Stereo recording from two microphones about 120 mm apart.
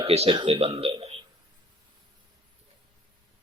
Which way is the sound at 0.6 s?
55° right (ahead or behind).